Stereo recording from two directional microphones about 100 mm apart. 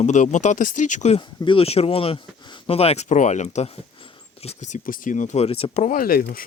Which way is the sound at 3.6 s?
75° left (ahead or behind).